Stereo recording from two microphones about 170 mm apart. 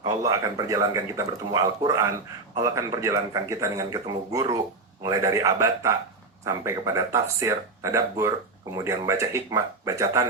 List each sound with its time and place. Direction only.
0.0 s speech: 20° right (ahead or behind)